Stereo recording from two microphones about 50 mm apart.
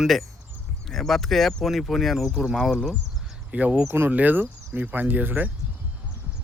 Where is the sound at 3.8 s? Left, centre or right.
Right.